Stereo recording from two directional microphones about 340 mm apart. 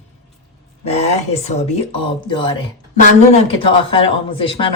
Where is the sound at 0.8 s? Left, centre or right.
Centre.